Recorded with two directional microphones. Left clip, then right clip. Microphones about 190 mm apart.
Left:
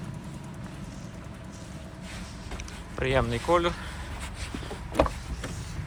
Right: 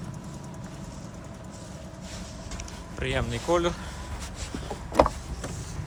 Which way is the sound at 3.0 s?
10° right (ahead or behind).